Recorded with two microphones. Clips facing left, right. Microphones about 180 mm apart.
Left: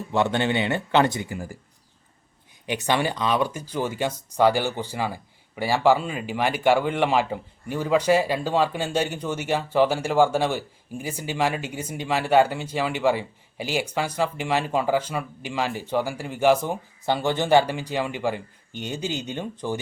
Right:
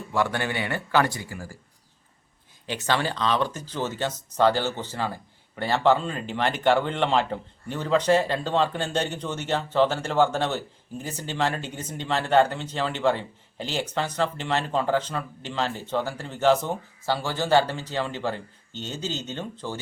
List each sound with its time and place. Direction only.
0.1 s speech: 25° left (ahead or behind)
2.6 s speech: 15° left (ahead or behind)